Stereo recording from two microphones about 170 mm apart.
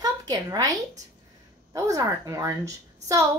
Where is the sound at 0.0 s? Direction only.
20° right (ahead or behind).